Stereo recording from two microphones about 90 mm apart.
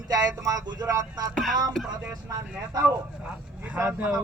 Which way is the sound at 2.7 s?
40° right (ahead or behind).